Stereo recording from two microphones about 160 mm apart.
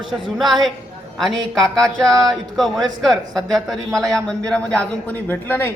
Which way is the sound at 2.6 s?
Centre (ahead or behind).